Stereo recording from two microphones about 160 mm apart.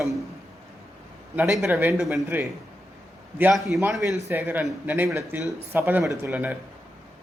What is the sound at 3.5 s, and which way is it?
Speech, centre (ahead or behind).